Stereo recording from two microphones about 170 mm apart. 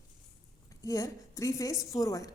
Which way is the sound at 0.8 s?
20° left (ahead or behind).